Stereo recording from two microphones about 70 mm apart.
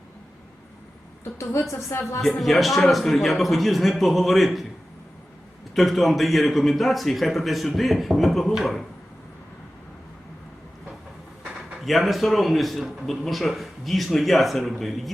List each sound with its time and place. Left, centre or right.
1.2 s a woman's voice: left
2.4 s a man's voice: centre
5.7 s a man's voice: centre
11.8 s a man's voice: centre